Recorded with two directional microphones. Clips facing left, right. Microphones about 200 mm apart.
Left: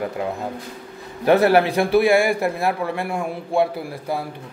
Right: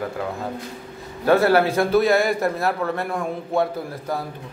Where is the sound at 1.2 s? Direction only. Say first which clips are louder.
Left 1 dB; 20° left (ahead or behind).